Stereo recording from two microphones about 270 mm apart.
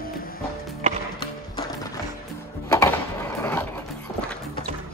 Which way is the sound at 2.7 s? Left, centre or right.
Centre.